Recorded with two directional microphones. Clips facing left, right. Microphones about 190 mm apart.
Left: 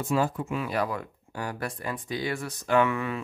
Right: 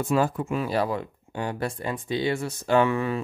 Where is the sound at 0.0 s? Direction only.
55° right (ahead or behind).